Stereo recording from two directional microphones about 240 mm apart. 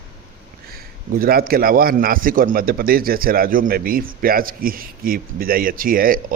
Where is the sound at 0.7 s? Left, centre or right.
Right.